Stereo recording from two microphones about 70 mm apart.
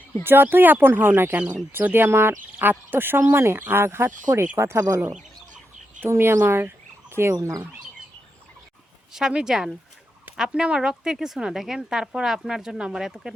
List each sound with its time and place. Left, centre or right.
0.3 s speech: right
6.0 s fowl: right
7.3 s speech: right
9.1 s speech: centre